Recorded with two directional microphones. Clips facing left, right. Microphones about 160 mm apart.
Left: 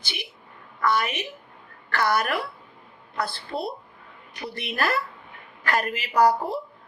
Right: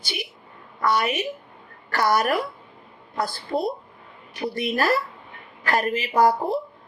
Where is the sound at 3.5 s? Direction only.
25° right (ahead or behind).